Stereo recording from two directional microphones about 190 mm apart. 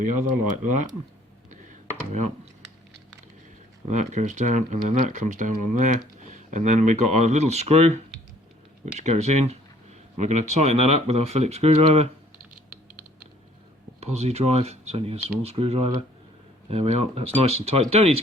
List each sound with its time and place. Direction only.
0.0 s speech: 40° right (ahead or behind)
2.1 s speech: 35° right (ahead or behind)
3.8 s speech: 40° right (ahead or behind)
9.0 s speech: 35° right (ahead or behind)
14.0 s speech: 35° right (ahead or behind)